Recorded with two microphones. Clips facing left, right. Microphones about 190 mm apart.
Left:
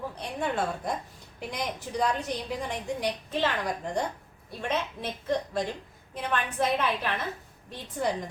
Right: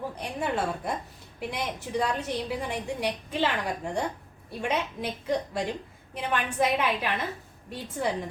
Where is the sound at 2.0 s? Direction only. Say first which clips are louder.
Left 1 dB; 5° right (ahead or behind).